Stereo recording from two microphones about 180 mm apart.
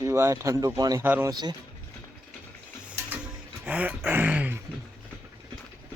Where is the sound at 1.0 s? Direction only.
10° right (ahead or behind).